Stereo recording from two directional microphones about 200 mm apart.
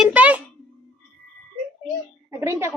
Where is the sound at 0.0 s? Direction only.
5° right (ahead or behind).